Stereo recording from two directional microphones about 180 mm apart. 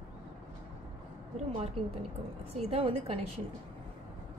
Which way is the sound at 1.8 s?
30° right (ahead or behind).